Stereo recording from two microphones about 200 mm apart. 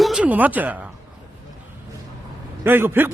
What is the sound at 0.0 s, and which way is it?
Speech, 5° right (ahead or behind).